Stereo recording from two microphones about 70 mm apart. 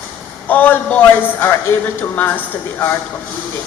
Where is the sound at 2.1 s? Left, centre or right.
Left.